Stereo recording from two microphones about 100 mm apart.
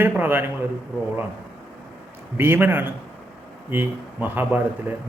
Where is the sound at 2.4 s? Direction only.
20° right (ahead or behind).